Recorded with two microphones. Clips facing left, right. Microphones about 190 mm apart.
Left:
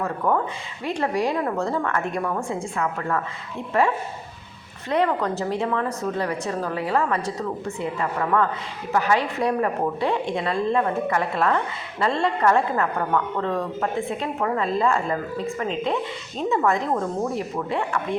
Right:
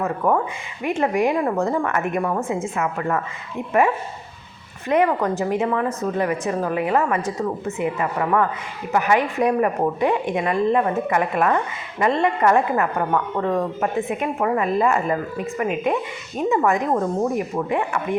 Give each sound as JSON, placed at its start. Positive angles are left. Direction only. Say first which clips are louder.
{"t": 0.2, "sound": "a woman's voice", "louder": "right 2 dB", "side_deg": -20}